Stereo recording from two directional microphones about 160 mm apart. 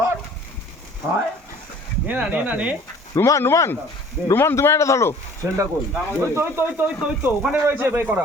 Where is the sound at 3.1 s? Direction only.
20° left (ahead or behind).